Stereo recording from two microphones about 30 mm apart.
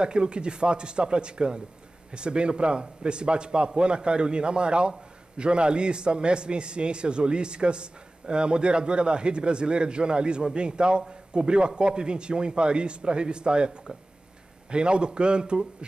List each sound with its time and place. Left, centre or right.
0.0 s a man's voice: right